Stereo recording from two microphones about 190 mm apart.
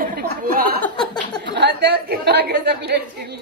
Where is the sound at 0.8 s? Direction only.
5° left (ahead or behind).